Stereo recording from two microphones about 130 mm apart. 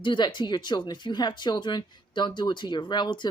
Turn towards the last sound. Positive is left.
turn(degrees=35)  # may be behind; listen again after turning